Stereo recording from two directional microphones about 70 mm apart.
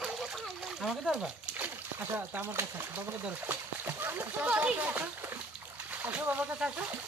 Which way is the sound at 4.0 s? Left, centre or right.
Right.